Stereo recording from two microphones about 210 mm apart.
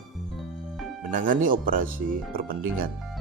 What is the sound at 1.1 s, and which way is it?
A man's voice, 40° right (ahead or behind).